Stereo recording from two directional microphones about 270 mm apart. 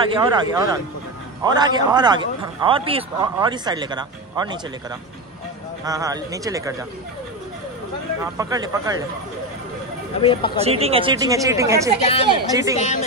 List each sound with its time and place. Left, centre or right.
0.0 s a man's voice: centre
5.9 s a man's voice: centre
8.4 s a man's voice: centre
10.2 s speech: centre
10.6 s a man's voice: right
12.0 s speech: left
12.3 s a man's voice: centre
12.7 s speech: left